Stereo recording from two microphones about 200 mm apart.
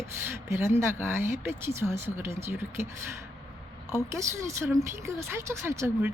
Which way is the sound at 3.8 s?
15° right (ahead or behind).